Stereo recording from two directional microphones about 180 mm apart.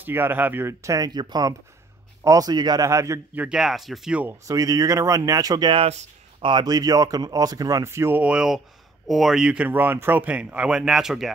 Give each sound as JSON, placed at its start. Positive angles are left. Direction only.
{"t": 0.0, "sound": "speech", "side_deg": -10}
{"t": 3.4, "sound": "speech", "side_deg": 0}
{"t": 6.5, "sound": "speech", "side_deg": -20}